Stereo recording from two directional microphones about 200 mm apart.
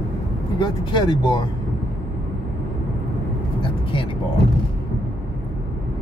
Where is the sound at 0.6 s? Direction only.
25° left (ahead or behind).